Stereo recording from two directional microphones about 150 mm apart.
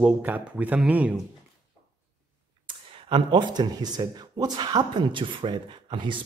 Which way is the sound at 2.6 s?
30° right (ahead or behind).